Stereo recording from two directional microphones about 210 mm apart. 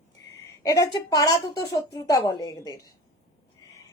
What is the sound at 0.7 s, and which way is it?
A woman's voice, 15° left (ahead or behind).